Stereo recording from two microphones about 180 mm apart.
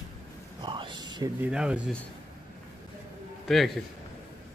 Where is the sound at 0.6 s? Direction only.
25° right (ahead or behind).